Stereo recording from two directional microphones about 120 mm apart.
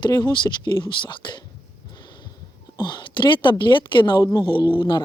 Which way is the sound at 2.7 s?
40° left (ahead or behind).